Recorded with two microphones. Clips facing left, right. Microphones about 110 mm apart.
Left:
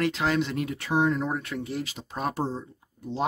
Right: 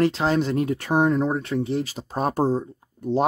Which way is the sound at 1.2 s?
30° right (ahead or behind).